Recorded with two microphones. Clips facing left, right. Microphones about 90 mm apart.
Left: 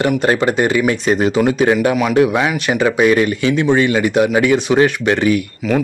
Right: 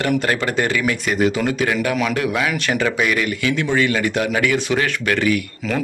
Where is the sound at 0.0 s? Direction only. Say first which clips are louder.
Left 5 dB; 25° left (ahead or behind).